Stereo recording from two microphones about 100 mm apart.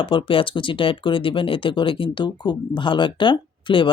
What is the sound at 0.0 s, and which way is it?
Speech, 60° left (ahead or behind).